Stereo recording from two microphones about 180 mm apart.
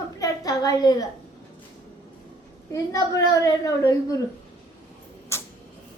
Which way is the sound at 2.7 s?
20° left (ahead or behind).